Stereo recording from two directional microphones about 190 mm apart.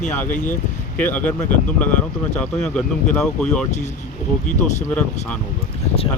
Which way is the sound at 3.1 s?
5° left (ahead or behind).